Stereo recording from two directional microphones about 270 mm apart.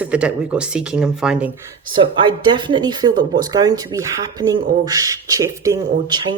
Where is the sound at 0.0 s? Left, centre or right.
Centre.